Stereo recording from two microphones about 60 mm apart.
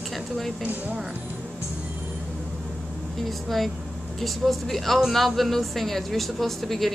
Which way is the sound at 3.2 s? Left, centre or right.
Centre.